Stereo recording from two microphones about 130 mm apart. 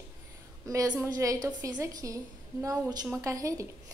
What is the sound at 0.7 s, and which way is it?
A woman's voice, 25° right (ahead or behind).